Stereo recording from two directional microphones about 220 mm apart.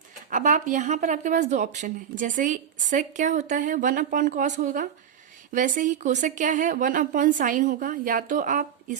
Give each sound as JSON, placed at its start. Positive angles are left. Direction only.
{"t": 0.3, "sound": "a woman's voice", "side_deg": -35}